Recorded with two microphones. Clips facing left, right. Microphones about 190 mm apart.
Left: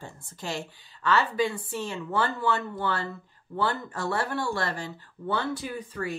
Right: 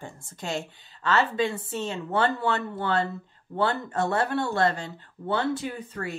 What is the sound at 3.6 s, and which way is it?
Speech, 20° right (ahead or behind).